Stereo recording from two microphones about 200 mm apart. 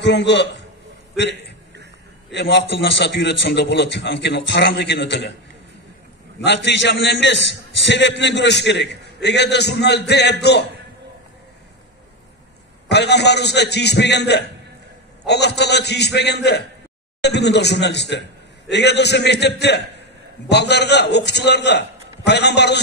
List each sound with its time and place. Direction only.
0.0 s a man's voice: 60° left (ahead or behind)
6.4 s a man's voice: 60° left (ahead or behind)
12.8 s a man's voice: 55° left (ahead or behind)